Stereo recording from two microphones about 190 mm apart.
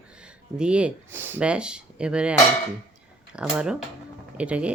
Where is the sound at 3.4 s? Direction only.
5° right (ahead or behind).